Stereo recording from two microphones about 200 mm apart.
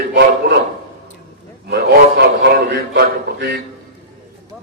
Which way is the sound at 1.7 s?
55° right (ahead or behind).